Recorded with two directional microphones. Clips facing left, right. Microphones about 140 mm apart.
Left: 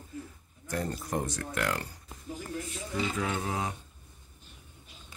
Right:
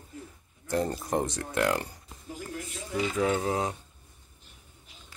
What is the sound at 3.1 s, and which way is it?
Speech, 30° right (ahead or behind).